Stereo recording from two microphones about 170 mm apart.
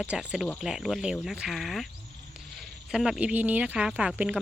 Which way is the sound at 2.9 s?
5° right (ahead or behind).